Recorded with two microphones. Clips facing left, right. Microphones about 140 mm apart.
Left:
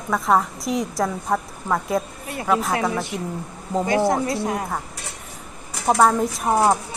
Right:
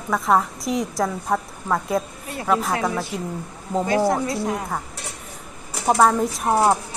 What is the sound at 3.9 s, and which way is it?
Speech, 15° left (ahead or behind).